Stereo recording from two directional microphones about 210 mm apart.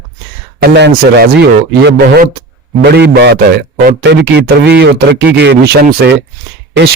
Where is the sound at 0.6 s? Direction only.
50° right (ahead or behind).